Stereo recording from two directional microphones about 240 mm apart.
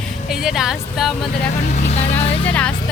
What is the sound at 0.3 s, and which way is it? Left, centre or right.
Speech, centre.